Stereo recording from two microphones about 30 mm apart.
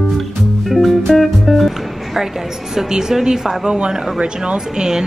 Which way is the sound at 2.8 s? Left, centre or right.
Centre.